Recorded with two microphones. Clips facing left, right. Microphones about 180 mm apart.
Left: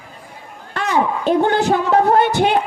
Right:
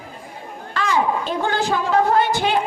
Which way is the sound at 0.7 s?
60° left (ahead or behind).